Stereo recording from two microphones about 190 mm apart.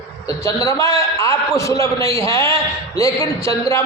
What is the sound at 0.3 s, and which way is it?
A man's voice, 15° left (ahead or behind).